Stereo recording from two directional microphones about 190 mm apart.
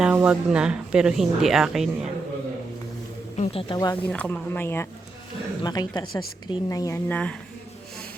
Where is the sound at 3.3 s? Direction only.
35° left (ahead or behind).